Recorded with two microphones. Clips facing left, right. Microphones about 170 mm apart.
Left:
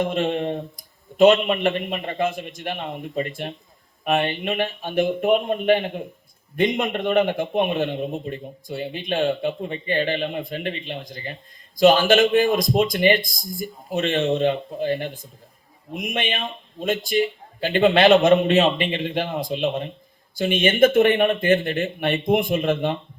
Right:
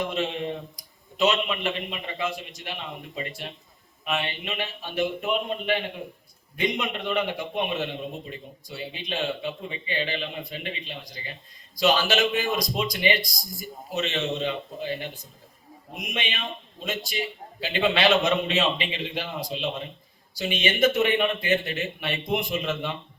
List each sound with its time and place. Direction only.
0.0 s a man's voice: 50° left (ahead or behind)